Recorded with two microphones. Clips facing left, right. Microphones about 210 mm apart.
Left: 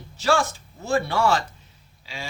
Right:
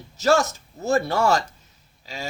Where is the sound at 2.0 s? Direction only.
40° right (ahead or behind).